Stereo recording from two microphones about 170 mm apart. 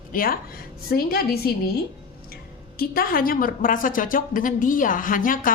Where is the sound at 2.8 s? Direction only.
60° left (ahead or behind).